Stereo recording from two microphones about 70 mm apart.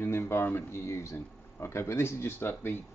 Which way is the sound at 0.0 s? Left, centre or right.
Left.